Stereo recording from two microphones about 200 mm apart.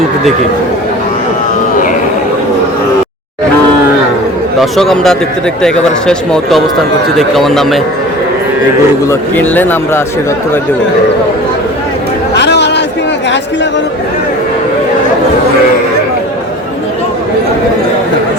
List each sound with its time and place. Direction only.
4.6 s speech: centre (ahead or behind)
9.0 s speech: 10° left (ahead or behind)
12.3 s chatter: 60° left (ahead or behind)